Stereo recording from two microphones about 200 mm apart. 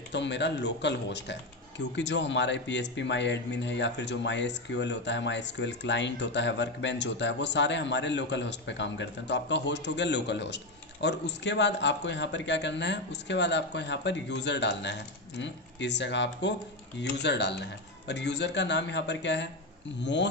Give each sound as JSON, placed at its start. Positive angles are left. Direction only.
{"t": 0.1, "sound": "speech", "side_deg": 60}